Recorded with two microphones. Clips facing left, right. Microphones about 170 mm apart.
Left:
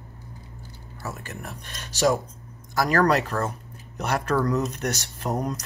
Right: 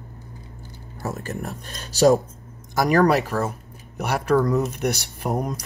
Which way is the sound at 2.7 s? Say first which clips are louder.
Right 3 dB; 15° right (ahead or behind).